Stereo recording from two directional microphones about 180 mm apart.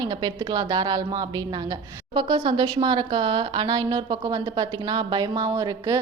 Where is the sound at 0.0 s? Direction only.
25° right (ahead or behind).